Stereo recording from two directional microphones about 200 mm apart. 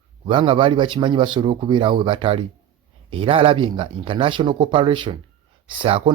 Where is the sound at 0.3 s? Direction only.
25° right (ahead or behind).